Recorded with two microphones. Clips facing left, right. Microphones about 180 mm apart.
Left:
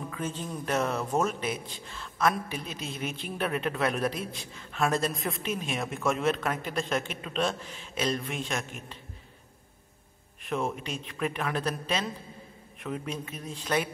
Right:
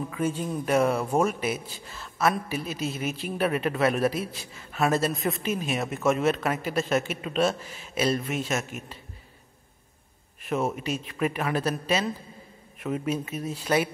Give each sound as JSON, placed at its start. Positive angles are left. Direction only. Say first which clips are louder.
{"t": 0.1, "sound": "a man's voice", "louder": "right 8 dB", "side_deg": -10}
{"t": 10.4, "sound": "a man's voice", "louder": "right 4 dB", "side_deg": -5}